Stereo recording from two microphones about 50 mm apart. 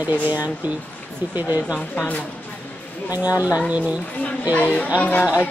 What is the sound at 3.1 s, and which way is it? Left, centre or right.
Speech, right.